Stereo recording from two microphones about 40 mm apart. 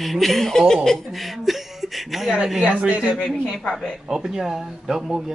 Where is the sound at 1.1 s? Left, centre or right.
Centre.